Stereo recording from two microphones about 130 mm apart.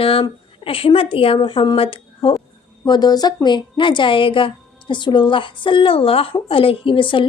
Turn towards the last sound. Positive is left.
turn(degrees=40)  # may be behind; listen again after turning